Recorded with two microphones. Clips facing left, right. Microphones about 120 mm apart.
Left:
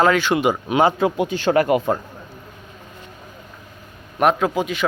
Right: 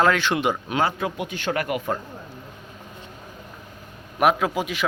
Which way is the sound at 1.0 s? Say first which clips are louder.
Left 8 dB; 30° left (ahead or behind).